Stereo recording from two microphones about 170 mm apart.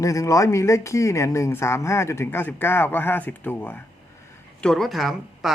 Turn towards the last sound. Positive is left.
turn(degrees=0)  # may be behind; listen again after turning